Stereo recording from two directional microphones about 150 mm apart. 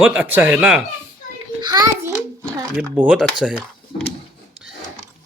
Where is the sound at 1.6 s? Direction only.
25° right (ahead or behind).